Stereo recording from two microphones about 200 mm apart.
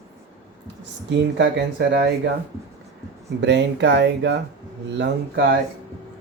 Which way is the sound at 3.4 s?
60° right (ahead or behind).